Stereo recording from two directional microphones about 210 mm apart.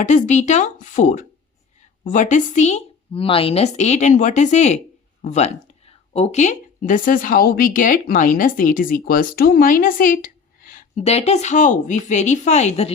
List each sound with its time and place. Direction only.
0.0 s speech: 35° left (ahead or behind)